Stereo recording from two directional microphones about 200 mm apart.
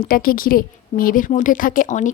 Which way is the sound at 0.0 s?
45° left (ahead or behind).